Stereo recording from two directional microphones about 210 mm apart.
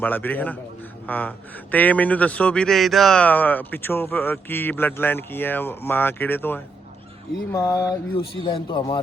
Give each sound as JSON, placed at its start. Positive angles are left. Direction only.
{"t": 0.0, "sound": "speech", "side_deg": 10}